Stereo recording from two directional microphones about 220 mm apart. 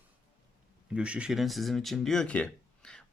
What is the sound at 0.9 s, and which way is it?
Speech, 5° right (ahead or behind).